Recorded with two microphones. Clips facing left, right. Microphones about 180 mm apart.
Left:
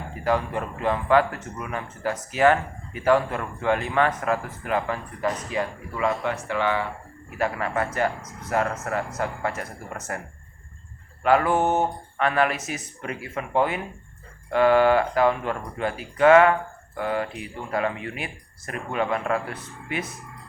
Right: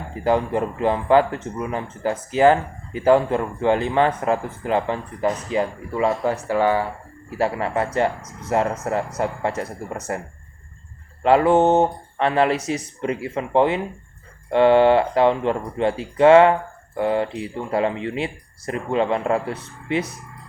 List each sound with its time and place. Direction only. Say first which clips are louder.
0.1 s speech: right 5 dB; 25° right (ahead or behind)
11.2 s speech: right 5 dB; 25° right (ahead or behind)